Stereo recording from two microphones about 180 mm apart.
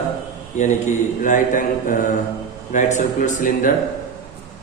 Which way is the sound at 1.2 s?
45° left (ahead or behind).